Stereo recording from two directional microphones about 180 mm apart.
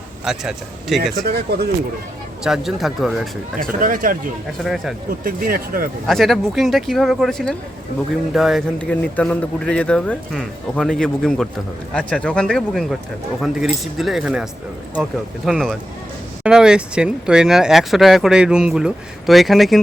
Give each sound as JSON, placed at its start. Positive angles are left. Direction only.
{"t": 0.3, "sound": "speech", "side_deg": 0}
{"t": 1.3, "sound": "speech", "side_deg": -60}
{"t": 2.4, "sound": "speech", "side_deg": 0}
{"t": 3.6, "sound": "speech", "side_deg": -50}
{"t": 4.6, "sound": "speech", "side_deg": 0}
{"t": 5.2, "sound": "speech", "side_deg": -55}
{"t": 6.1, "sound": "speech", "side_deg": 0}
{"t": 15.4, "sound": "speech", "side_deg": 0}